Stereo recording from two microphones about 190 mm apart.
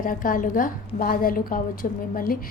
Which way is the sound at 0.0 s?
45° left (ahead or behind).